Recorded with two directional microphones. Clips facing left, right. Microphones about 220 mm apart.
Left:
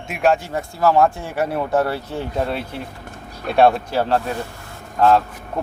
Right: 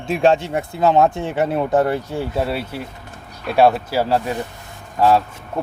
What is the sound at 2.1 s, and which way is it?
Speech, 10° right (ahead or behind).